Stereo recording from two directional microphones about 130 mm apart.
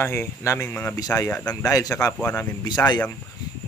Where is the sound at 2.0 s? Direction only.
15° left (ahead or behind).